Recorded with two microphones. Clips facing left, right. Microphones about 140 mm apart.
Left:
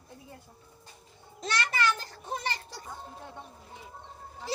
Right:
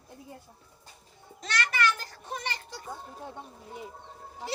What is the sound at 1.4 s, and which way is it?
Speech, 30° left (ahead or behind).